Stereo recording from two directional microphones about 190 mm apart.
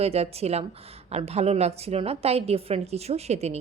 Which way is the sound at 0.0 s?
30° right (ahead or behind).